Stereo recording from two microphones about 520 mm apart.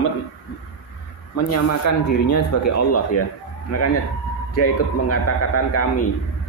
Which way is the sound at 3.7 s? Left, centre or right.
Left.